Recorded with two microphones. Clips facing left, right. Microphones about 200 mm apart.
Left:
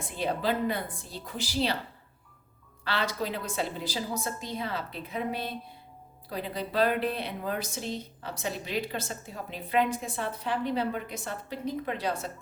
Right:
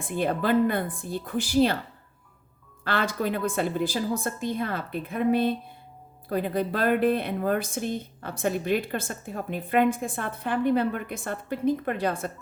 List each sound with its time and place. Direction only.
0.0 s speech: 55° right (ahead or behind)
2.8 s speech: 50° right (ahead or behind)